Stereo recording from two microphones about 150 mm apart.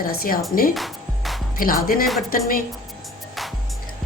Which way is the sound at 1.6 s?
70° left (ahead or behind).